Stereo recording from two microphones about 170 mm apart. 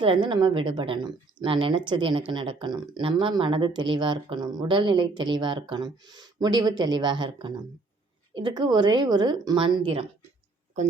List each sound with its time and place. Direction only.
0.0 s speech: 30° right (ahead or behind)